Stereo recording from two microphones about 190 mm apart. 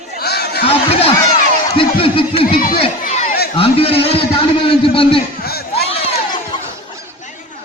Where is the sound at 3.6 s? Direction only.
30° left (ahead or behind).